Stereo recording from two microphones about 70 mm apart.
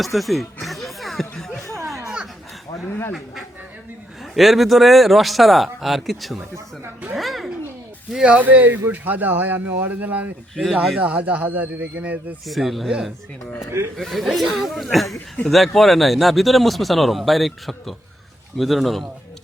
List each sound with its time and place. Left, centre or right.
0.0 s music: centre
4.4 s a child's voice: centre
8.1 s speech: centre
10.5 s speech: centre
10.8 s speech: centre
12.5 s speech: centre
13.7 s speech: right
13.9 s speech: centre